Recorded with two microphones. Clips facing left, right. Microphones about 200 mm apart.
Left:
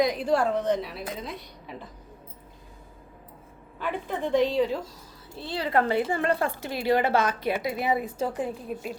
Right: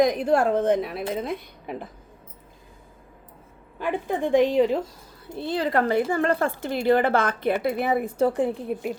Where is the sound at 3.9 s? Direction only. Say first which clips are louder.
Right 4 dB; 50° right (ahead or behind).